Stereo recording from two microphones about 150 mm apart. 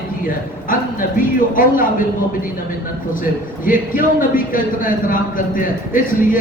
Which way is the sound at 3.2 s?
65° left (ahead or behind).